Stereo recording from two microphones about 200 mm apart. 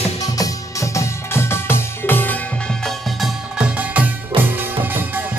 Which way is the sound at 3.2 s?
5° right (ahead or behind).